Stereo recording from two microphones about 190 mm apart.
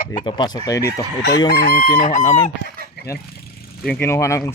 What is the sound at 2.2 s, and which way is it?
Speech, 20° left (ahead or behind).